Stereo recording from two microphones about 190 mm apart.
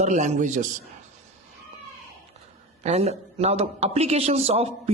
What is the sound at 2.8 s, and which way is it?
Speech, 35° right (ahead or behind).